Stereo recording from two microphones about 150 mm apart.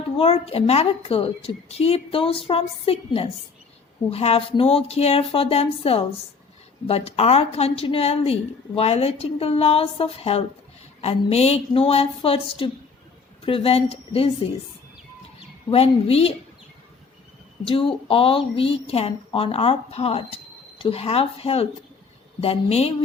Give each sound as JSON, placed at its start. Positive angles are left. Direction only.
{"t": 0.2, "sound": "a woman's voice", "side_deg": 40}
{"t": 15.7, "sound": "a woman's voice", "side_deg": 40}
{"t": 17.6, "sound": "a woman's voice", "side_deg": 35}